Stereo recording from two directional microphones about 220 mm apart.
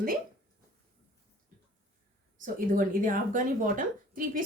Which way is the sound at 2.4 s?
35° right (ahead or behind).